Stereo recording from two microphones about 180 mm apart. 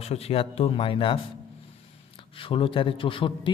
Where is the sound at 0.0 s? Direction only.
35° left (ahead or behind).